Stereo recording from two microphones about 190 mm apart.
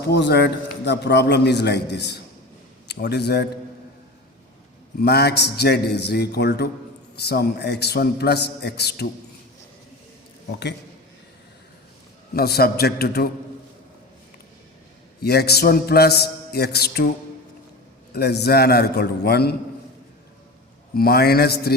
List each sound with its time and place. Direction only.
0.0 s a man's voice: 65° left (ahead or behind)
4.9 s a man's voice: 55° left (ahead or behind)
12.3 s a man's voice: 55° left (ahead or behind)
15.2 s a man's voice: 60° left (ahead or behind)
18.1 s a man's voice: 60° left (ahead or behind)
20.9 s a man's voice: 55° left (ahead or behind)